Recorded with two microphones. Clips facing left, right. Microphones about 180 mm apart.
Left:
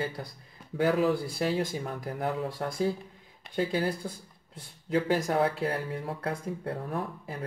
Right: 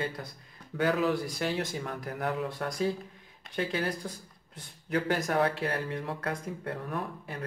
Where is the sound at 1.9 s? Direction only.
25° left (ahead or behind).